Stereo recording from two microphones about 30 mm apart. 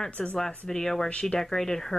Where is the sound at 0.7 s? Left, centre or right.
Centre.